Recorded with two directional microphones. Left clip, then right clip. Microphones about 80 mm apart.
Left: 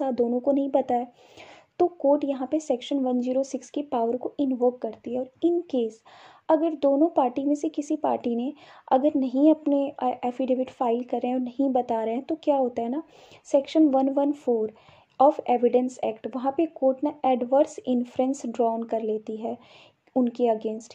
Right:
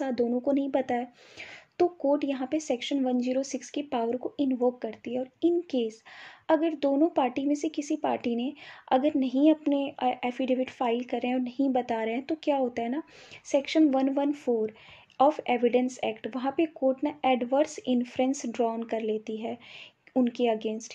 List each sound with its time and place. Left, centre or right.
0.0 s speech: left